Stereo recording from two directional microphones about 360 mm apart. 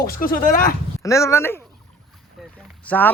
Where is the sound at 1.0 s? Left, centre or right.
Centre.